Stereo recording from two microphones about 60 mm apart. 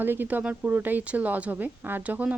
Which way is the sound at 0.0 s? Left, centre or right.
Right.